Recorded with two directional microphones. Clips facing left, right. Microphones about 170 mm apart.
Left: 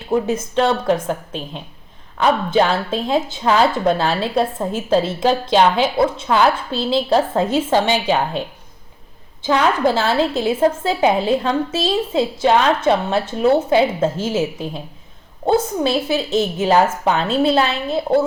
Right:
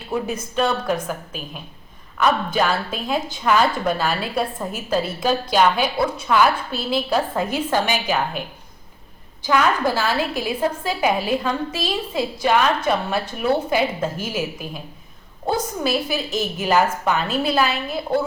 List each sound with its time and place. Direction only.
0.1 s a woman's voice: 25° left (ahead or behind)
9.5 s a woman's voice: 25° left (ahead or behind)